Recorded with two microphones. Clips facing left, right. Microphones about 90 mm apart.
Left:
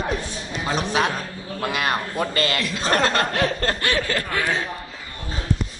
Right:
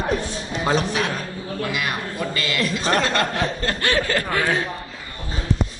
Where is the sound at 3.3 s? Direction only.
70° left (ahead or behind).